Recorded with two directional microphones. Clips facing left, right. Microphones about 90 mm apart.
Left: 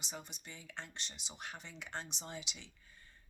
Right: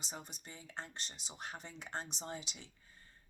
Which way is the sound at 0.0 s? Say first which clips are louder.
Even; 40° right (ahead or behind).